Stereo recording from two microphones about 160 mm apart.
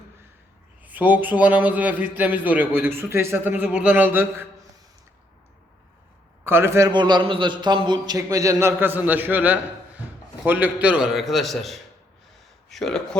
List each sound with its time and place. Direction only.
0.8 s a man's voice: 10° right (ahead or behind)
6.4 s a man's voice: 15° right (ahead or behind); by 13.0 s 5° left (ahead or behind)